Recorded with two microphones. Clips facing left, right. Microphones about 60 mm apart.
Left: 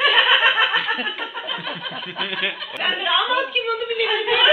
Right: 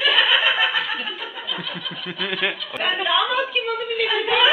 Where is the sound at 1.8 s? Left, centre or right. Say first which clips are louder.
Left 2 dB; left.